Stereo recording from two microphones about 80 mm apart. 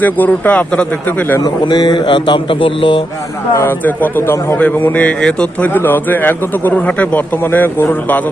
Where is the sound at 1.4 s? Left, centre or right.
Left.